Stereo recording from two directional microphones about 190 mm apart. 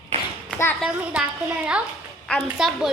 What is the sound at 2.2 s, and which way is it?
Speech, centre (ahead or behind).